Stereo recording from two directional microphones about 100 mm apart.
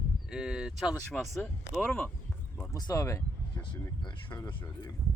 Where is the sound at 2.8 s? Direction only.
40° left (ahead or behind).